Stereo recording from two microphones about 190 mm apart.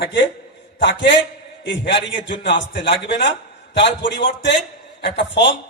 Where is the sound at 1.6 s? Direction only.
65° left (ahead or behind).